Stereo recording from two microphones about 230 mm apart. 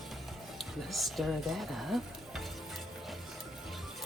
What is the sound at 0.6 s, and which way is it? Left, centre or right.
Speech, centre.